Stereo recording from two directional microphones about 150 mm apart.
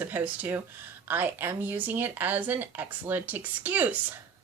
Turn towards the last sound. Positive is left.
turn(degrees=-10)  # may be behind; listen again after turning